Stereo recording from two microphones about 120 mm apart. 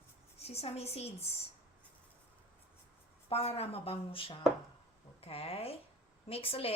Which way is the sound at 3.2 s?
55° left (ahead or behind).